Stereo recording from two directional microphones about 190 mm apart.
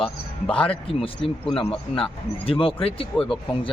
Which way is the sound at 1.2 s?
5° left (ahead or behind).